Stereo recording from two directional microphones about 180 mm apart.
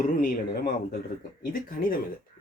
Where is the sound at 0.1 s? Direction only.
50° left (ahead or behind).